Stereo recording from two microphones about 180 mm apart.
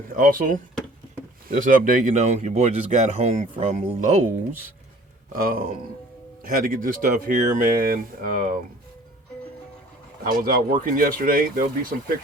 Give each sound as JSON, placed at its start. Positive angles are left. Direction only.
{"t": 0.1, "sound": "speech", "side_deg": -50}
{"t": 5.3, "sound": "speech", "side_deg": -55}
{"t": 10.2, "sound": "speech", "side_deg": -50}